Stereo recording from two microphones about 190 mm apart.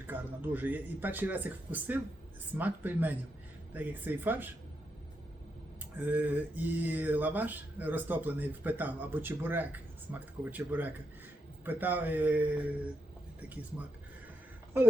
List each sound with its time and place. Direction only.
0.1 s speech: 10° right (ahead or behind)
6.0 s speech: 10° right (ahead or behind)